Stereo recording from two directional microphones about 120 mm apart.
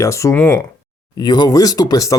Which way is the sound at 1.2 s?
35° left (ahead or behind).